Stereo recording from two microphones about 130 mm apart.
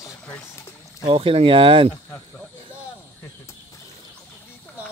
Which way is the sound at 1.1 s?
45° right (ahead or behind).